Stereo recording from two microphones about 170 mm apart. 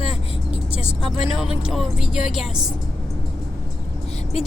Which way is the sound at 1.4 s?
Centre (ahead or behind).